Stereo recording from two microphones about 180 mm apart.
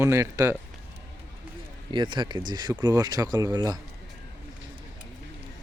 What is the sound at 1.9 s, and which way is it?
Speech, 25° right (ahead or behind).